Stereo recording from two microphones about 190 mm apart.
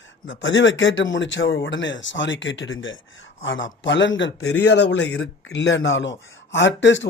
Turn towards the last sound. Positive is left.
turn(degrees=70)  # may be behind; listen again after turning